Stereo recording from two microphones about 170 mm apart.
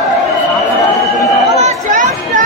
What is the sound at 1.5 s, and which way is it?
Chatter, 45° right (ahead or behind).